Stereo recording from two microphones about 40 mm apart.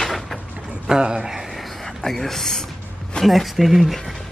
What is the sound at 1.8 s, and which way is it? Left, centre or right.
Speech, centre.